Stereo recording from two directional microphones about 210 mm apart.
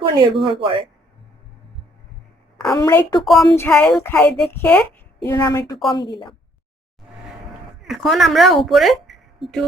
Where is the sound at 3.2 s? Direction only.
Centre (ahead or behind); by 6.3 s 20° left (ahead or behind).